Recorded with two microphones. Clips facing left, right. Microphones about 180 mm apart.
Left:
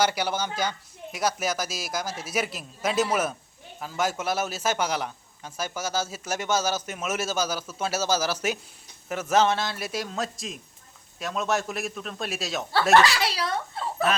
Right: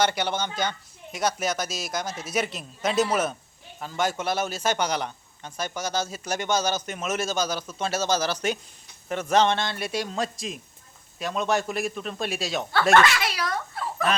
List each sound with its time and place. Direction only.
0.0 s a man's voice: 5° left (ahead or behind)
13.0 s speech: 35° left (ahead or behind)